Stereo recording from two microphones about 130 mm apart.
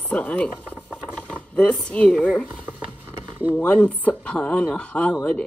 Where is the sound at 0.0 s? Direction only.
10° left (ahead or behind).